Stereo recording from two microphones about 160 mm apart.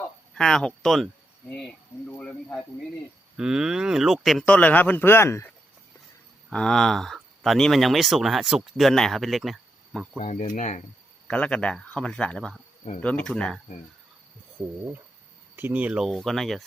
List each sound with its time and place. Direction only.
0.3 s speech: 5° left (ahead or behind)
3.3 s speech: 5° right (ahead or behind); by 5.5 s 15° left (ahead or behind)
6.5 s speech: 5° left (ahead or behind)
10.2 s speech: 50° left (ahead or behind)
11.3 s speech: 5° left (ahead or behind)
15.5 s speech: 10° right (ahead or behind)